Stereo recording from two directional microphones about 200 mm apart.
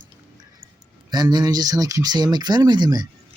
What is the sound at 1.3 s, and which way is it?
Speech, 20° right (ahead or behind).